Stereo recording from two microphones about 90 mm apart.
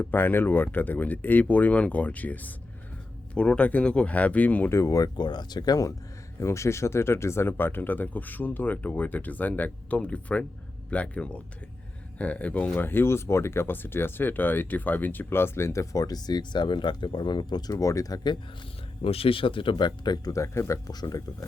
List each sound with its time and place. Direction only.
0.0 s speech: 20° left (ahead or behind)
4.7 s speech: 35° left (ahead or behind)
5.1 s speech: 55° left (ahead or behind)
6.4 s speech: 30° left (ahead or behind); by 17.7 s 55° left (ahead or behind)
17.7 s speech: 40° left (ahead or behind)
19.0 s speech: 90° left; by 19.7 s 70° left (ahead or behind)
19.7 s speech: 50° left (ahead or behind)
20.3 s speech: 35° left (ahead or behind)